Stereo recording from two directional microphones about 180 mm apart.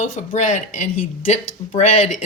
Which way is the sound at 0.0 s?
45° left (ahead or behind).